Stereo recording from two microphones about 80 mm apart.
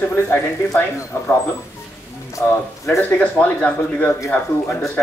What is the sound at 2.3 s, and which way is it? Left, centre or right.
Speech, left.